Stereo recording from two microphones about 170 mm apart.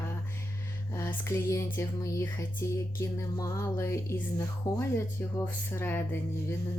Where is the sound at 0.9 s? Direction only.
20° left (ahead or behind).